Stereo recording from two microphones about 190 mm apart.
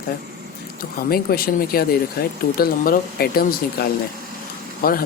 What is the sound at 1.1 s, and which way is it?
Speech, 50° left (ahead or behind).